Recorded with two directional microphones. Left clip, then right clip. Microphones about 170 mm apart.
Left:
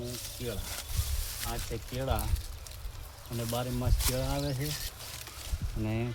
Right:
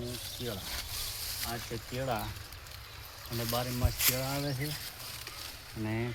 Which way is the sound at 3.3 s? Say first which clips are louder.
Right 1 dB; 60° left (ahead or behind).